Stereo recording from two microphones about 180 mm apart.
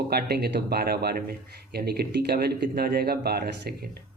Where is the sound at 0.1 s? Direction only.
60° right (ahead or behind).